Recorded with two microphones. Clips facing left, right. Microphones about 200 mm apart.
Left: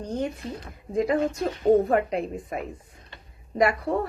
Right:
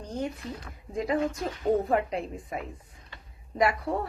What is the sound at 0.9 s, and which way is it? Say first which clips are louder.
A woman's voice: left 4 dB; 50° left (ahead or behind).